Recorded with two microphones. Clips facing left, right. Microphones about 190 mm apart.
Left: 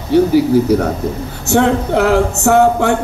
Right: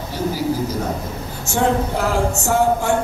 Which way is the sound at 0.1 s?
65° left (ahead or behind).